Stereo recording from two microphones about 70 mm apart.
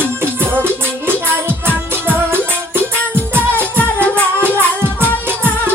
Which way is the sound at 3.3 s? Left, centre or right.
Right.